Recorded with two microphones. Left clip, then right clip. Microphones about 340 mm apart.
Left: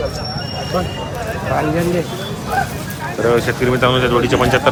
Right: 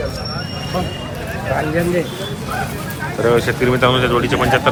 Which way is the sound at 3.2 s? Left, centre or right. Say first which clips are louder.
Even; centre.